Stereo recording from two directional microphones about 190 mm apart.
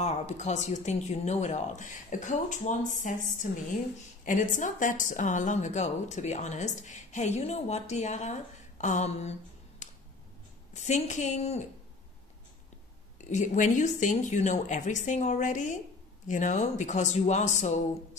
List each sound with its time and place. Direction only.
0.0 s a woman's voice: 35° left (ahead or behind)
9.8 s finger snapping: 40° left (ahead or behind)
10.7 s a woman's voice: 40° left (ahead or behind)
13.3 s a woman's voice: 40° left (ahead or behind)